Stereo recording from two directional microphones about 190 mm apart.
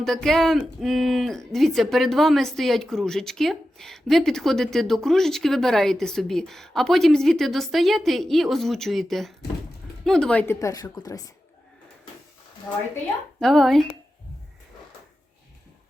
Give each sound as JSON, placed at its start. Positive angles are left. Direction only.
{"t": 0.0, "sound": "a woman's voice", "side_deg": 0}
{"t": 13.4, "sound": "speech", "side_deg": 0}